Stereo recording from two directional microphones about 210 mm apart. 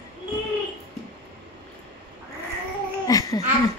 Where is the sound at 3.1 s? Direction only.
15° left (ahead or behind).